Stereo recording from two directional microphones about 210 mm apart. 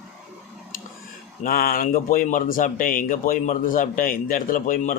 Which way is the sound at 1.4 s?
45° left (ahead or behind).